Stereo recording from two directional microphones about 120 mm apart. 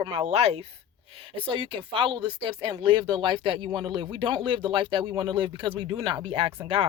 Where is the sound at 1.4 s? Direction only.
45° right (ahead or behind).